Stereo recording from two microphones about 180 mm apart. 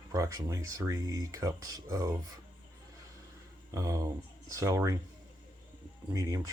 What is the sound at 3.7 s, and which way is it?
Speech, 20° right (ahead or behind).